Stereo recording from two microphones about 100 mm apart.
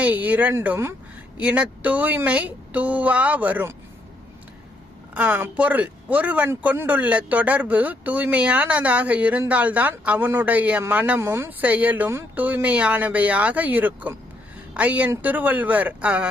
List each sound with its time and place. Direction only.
0.0 s speech: 15° right (ahead or behind)
5.1 s speech: 15° right (ahead or behind)
11.2 s speech: 25° right (ahead or behind)
11.6 s speech: 15° right (ahead or behind)